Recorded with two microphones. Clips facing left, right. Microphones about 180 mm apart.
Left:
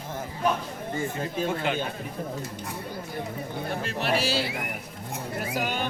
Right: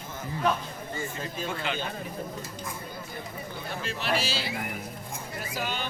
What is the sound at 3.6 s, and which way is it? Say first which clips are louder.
Speech: left 3 dB; 55° left (ahead or behind).